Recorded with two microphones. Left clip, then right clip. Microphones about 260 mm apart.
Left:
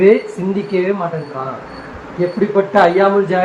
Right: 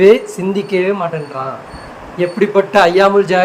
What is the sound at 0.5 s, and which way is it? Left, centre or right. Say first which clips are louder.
Speech: right 2 dB; right.